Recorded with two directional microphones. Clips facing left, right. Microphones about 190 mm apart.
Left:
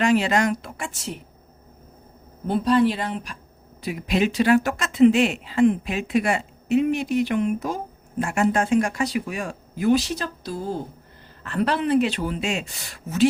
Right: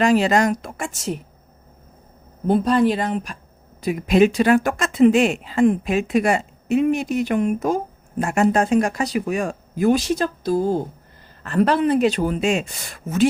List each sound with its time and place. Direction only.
0.0 s speech: 40° right (ahead or behind)
2.5 s speech: 45° right (ahead or behind)